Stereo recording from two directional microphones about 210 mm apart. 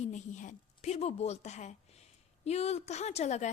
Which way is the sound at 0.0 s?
35° left (ahead or behind).